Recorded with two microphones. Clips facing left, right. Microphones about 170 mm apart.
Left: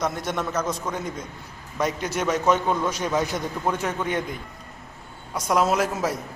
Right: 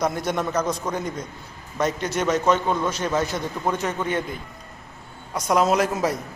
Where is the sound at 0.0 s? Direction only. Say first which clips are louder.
Right 3 dB; centre (ahead or behind).